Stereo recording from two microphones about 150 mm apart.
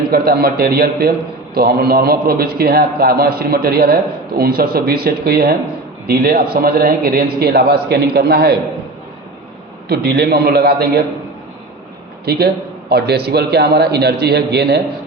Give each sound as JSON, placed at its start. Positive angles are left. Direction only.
{"t": 0.1, "sound": "a man's voice", "side_deg": -90}
{"t": 9.9, "sound": "a man's voice", "side_deg": -90}
{"t": 12.2, "sound": "a man's voice", "side_deg": -90}